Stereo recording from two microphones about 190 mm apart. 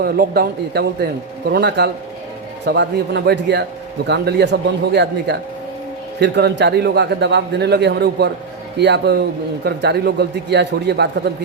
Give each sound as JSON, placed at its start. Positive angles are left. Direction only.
{"t": 0.0, "sound": "speech", "side_deg": -55}